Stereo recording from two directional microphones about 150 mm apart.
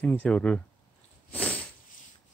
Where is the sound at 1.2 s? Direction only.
10° left (ahead or behind).